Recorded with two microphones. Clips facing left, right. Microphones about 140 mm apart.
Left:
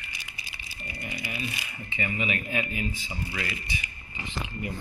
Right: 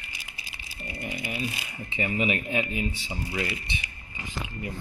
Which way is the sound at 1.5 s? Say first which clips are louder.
Right 2 dB; 30° right (ahead or behind).